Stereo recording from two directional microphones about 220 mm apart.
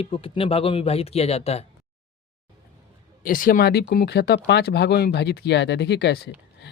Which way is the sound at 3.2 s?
40° left (ahead or behind).